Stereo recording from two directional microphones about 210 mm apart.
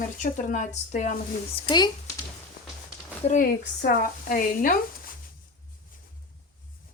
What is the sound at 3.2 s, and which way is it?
Speech, 40° left (ahead or behind).